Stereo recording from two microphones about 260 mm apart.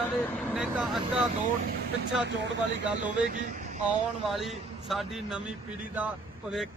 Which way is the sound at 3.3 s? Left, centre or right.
Right.